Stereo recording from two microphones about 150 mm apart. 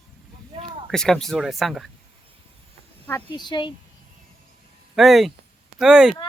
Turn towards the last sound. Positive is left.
turn(degrees=-5)  # may be behind; listen again after turning